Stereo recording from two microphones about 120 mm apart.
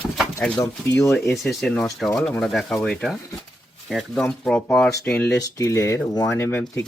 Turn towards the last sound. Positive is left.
turn(degrees=20)  # may be behind; listen again after turning